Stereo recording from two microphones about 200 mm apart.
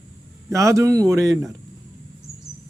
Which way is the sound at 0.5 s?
15° right (ahead or behind).